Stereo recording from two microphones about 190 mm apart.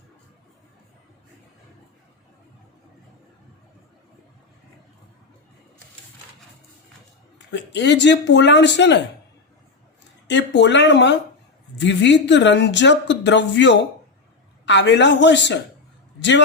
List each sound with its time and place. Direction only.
7.3 s speech: 70° left (ahead or behind)
10.2 s speech: 65° left (ahead or behind)